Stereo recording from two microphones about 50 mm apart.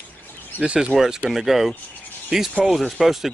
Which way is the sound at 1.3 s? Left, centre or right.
Centre.